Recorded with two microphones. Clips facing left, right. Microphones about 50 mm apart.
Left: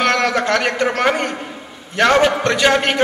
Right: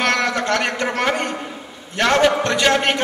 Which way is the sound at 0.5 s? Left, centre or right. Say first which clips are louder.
Left 3 dB; centre.